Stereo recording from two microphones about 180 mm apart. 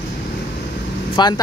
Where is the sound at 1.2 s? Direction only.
25° left (ahead or behind).